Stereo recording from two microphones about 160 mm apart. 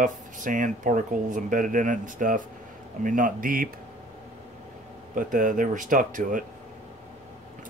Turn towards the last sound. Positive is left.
turn(degrees=-55)  # may be behind; listen again after turning